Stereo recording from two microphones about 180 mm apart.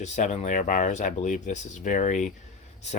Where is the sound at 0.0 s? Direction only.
40° left (ahead or behind).